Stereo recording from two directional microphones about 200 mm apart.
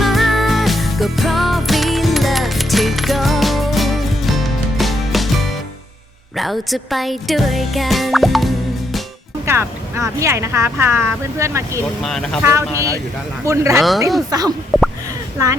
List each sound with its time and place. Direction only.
0.0 s music: centre (ahead or behind)
6.3 s speech: centre (ahead or behind)
9.5 s speech: 15° right (ahead or behind)
12.0 s speech: centre (ahead or behind)
12.4 s speech: 15° right (ahead or behind)
14.7 s a sound: centre (ahead or behind)